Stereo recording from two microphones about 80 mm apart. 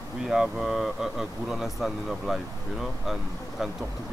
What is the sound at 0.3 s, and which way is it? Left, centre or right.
Speech, centre.